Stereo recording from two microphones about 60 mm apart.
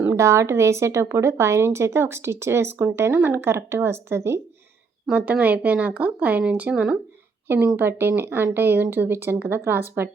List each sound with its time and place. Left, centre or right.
0.1 s a woman's voice: right
5.1 s speech: right
7.4 s a woman's voice: right